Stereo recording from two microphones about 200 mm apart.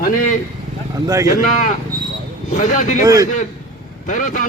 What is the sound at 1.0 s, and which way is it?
Speech, 15° right (ahead or behind).